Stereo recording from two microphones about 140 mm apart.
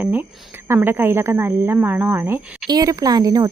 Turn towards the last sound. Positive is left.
turn(degrees=-25)  # may be behind; listen again after turning